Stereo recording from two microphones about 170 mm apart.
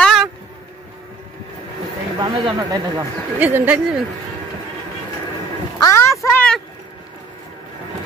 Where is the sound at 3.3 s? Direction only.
10° right (ahead or behind).